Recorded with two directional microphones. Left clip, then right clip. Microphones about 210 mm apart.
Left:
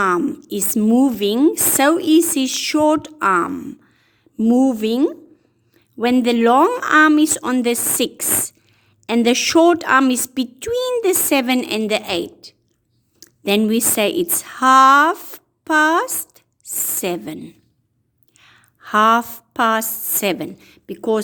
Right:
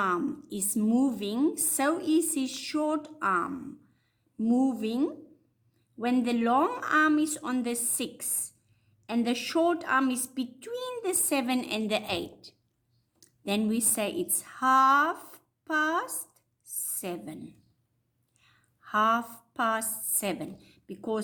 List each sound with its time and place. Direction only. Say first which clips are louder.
0.0 s a woman's voice: left 11 dB; 40° left (ahead or behind)